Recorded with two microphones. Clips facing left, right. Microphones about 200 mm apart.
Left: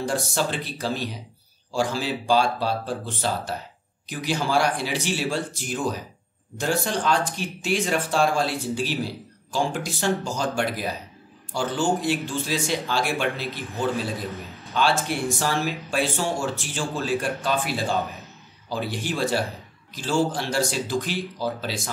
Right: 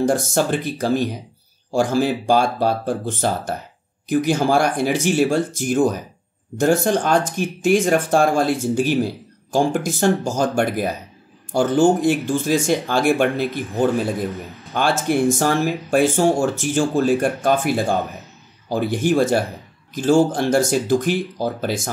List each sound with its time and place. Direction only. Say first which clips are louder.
0.0 s speech: right 7 dB; 50° right (ahead or behind)